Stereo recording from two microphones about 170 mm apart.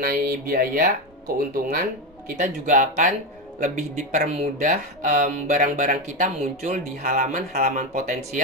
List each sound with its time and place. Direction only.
0.0 s speech: 60° right (ahead or behind)